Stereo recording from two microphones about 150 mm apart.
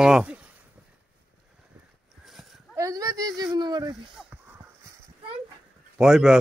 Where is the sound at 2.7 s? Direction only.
25° right (ahead or behind).